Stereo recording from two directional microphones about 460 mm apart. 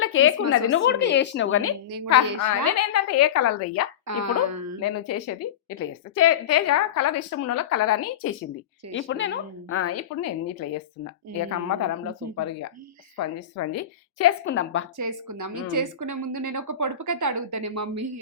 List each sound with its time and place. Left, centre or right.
0.0 s a sound: left
0.5 s a woman's voice: left
4.0 s speech: right
4.8 s a woman's voice: left
13.1 s a woman's voice: left
14.9 s speech: right